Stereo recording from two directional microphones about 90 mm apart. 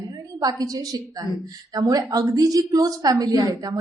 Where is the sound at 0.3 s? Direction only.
45° right (ahead or behind).